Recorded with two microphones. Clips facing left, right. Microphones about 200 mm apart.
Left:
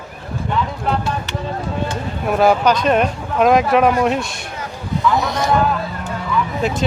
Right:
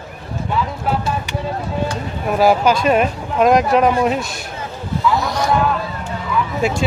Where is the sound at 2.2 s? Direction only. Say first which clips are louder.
Even; 5° right (ahead or behind).